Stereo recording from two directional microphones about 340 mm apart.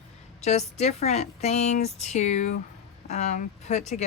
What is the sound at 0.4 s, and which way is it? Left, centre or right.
Speech, centre.